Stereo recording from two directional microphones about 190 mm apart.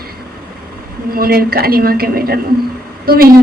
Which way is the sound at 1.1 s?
50° right (ahead or behind).